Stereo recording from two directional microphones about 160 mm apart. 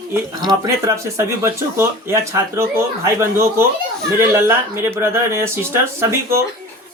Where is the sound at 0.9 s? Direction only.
15° right (ahead or behind).